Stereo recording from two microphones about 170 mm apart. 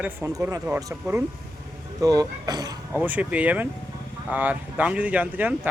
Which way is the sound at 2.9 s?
10° right (ahead or behind).